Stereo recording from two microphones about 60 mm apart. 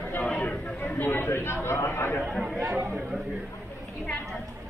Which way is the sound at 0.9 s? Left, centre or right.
Left.